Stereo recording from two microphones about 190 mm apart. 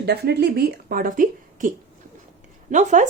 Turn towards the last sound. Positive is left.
turn(degrees=-40)  # may be behind; listen again after turning